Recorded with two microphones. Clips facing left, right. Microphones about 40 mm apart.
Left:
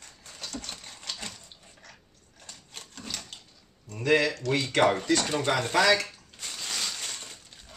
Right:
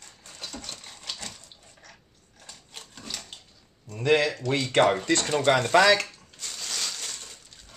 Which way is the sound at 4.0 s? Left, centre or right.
Right.